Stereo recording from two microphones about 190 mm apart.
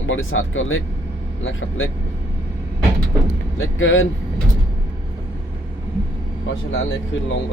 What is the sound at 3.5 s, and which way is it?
Speech, 90° left.